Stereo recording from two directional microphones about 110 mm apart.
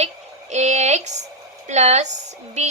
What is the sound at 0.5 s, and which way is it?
A woman's voice, 90° right.